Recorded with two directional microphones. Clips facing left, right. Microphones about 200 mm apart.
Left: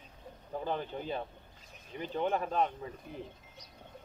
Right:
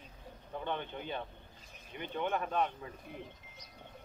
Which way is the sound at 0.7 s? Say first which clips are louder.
Left 3 dB; 35° left (ahead or behind).